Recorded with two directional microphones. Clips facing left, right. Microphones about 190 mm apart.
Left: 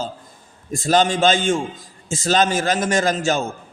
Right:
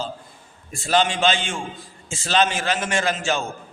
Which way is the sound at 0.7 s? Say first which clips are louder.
Left 3 dB; 40° left (ahead or behind).